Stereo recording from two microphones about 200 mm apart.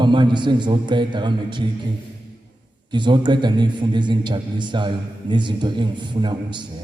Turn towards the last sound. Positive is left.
turn(degrees=-25)  # may be behind; listen again after turning